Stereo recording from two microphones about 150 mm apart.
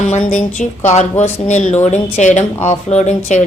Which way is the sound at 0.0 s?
55° left (ahead or behind).